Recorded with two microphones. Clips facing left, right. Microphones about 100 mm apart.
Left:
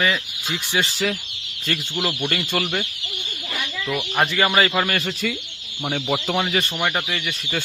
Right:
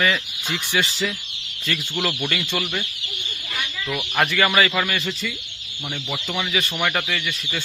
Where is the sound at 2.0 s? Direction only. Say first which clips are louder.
Even; 20° left (ahead or behind).